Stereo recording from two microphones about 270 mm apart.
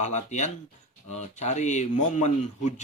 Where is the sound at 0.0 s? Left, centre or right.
Left.